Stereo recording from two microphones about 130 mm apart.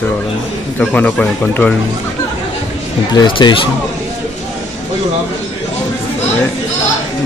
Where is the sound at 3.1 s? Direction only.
35° left (ahead or behind).